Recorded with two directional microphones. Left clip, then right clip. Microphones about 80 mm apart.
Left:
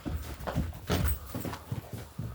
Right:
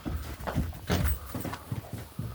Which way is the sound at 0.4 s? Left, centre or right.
Centre.